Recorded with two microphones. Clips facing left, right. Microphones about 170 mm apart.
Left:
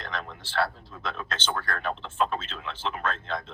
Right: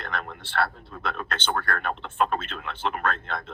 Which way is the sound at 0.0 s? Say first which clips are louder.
Right 2 dB; 60° right (ahead or behind).